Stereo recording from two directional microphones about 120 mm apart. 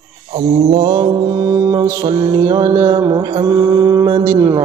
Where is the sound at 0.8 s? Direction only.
40° right (ahead or behind).